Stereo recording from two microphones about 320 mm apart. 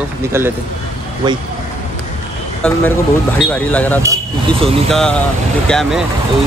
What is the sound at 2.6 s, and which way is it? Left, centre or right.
Speech, centre.